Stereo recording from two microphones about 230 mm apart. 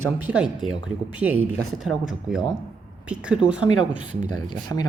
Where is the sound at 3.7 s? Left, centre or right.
Centre.